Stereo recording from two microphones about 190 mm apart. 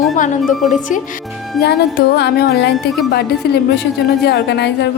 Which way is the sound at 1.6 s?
60° left (ahead or behind).